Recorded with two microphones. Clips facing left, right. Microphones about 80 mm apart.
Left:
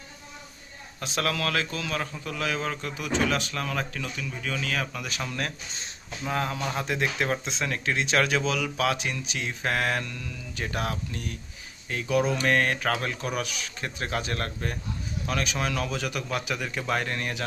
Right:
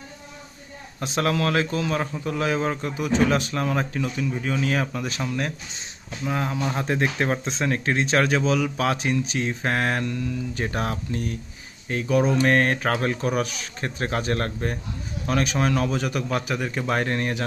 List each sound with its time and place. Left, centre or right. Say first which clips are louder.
0.9 s a man's voice: right 5 dB; right
5.2 s speech: right 3 dB; centre
6.8 s speech: right 4 dB; right